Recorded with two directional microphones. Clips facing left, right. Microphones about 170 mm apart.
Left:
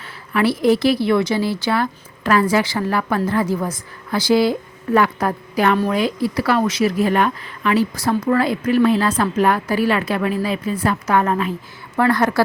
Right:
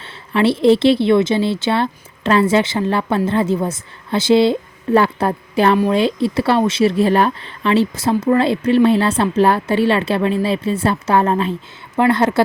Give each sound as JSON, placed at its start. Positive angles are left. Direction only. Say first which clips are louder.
{"t": 0.0, "sound": "a woman's voice", "louder": "right 3 dB", "side_deg": -25}